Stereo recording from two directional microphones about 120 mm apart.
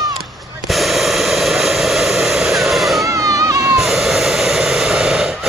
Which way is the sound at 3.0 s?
30° right (ahead or behind).